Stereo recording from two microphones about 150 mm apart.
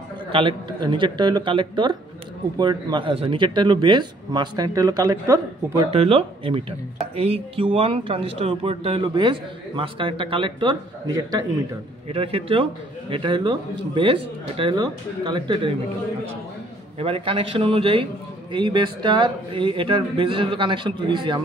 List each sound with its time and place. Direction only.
0.3 s speech: 35° right (ahead or behind); by 5.9 s 20° right (ahead or behind)
5.9 s speech: 40° right (ahead or behind); by 11.4 s 25° right (ahead or behind)
12.1 s speech: 40° right (ahead or behind)
17.0 s speech: 40° right (ahead or behind)